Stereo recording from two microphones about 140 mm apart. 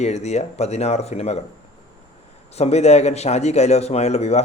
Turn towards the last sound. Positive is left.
turn(degrees=50)  # may be behind; listen again after turning